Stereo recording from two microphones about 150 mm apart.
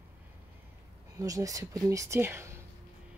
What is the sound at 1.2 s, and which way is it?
Speech, 20° right (ahead or behind).